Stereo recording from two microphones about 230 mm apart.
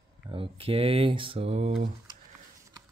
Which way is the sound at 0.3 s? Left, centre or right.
Right.